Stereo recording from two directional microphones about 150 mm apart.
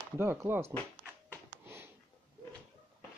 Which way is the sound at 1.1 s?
15° right (ahead or behind).